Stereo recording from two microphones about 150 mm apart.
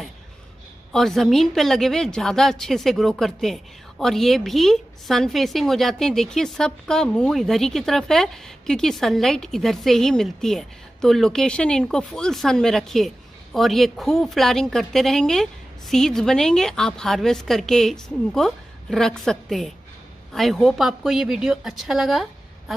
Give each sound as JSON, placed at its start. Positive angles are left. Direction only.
{"t": 0.9, "sound": "a woman's voice", "side_deg": 0}